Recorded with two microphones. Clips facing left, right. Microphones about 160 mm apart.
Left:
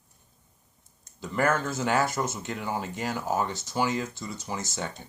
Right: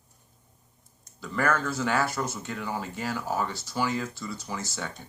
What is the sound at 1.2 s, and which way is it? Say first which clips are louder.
Speech: left 1 dB; 20° left (ahead or behind).